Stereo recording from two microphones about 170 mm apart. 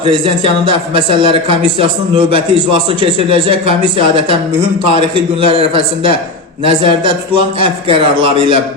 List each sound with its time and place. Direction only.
0.0 s a man's voice: 30° right (ahead or behind)
3.2 s a man's voice: 30° right (ahead or behind)